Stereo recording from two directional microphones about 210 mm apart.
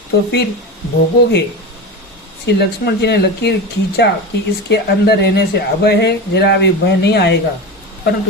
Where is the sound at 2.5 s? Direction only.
50° left (ahead or behind).